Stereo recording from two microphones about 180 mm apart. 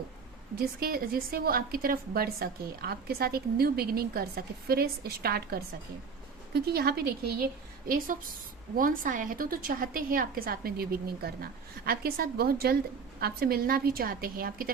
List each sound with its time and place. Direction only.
0.5 s a woman's voice: 60° right (ahead or behind)